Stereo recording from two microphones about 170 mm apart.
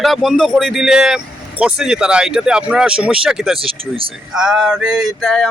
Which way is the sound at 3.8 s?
30° right (ahead or behind).